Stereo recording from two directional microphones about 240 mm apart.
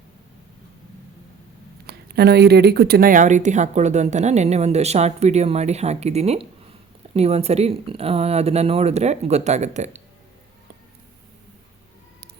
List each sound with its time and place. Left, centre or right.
1.9 s speech: right